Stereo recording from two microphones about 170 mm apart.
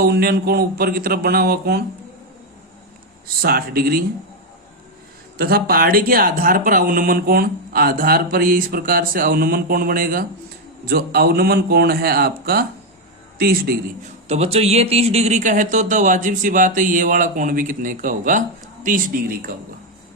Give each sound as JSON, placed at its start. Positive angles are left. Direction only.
{"t": 0.0, "sound": "speech", "side_deg": -65}
{"t": 3.4, "sound": "speech", "side_deg": -60}
{"t": 5.4, "sound": "speech", "side_deg": -65}
{"t": 14.3, "sound": "speech", "side_deg": -40}